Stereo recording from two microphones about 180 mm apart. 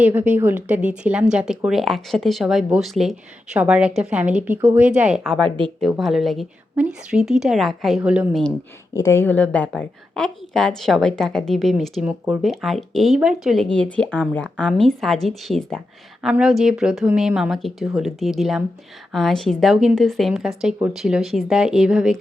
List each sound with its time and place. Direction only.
0.0 s a woman's voice: 10° right (ahead or behind)
9.0 s a woman's voice: 15° left (ahead or behind); by 22.2 s centre (ahead or behind)